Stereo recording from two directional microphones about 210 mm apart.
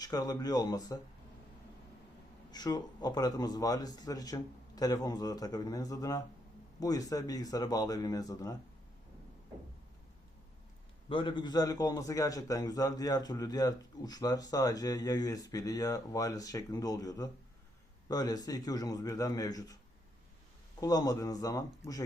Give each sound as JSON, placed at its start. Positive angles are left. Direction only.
{"t": 0.0, "sound": "speech", "side_deg": 20}
{"t": 2.5, "sound": "a man's voice", "side_deg": 20}
{"t": 11.1, "sound": "a man's voice", "side_deg": 20}
{"t": 20.8, "sound": "a man's voice", "side_deg": 15}